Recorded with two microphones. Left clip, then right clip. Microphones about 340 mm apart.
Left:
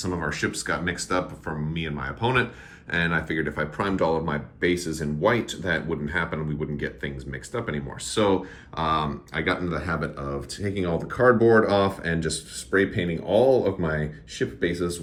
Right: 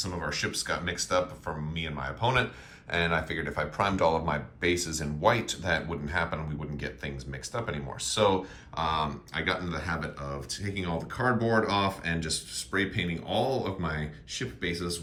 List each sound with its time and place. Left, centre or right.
0.0 s speech: centre